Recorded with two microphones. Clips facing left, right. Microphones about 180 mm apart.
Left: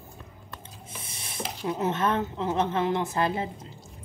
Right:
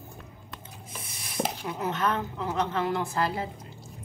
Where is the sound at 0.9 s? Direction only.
25° left (ahead or behind).